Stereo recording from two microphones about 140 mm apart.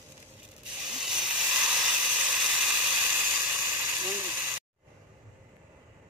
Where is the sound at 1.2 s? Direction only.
10° right (ahead or behind).